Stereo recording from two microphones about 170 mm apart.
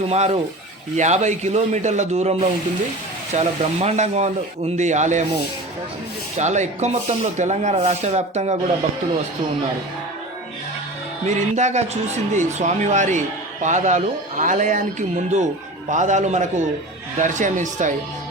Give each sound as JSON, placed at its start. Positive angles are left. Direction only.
{"t": 0.1, "sound": "a man's voice", "side_deg": -40}
{"t": 6.3, "sound": "a man's voice", "side_deg": -45}
{"t": 11.3, "sound": "a man's voice", "side_deg": -45}